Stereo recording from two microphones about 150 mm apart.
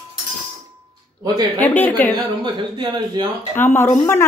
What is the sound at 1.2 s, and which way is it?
Speech, 25° right (ahead or behind).